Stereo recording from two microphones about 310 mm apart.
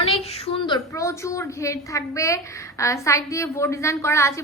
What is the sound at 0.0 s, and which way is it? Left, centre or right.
A woman's voice, centre.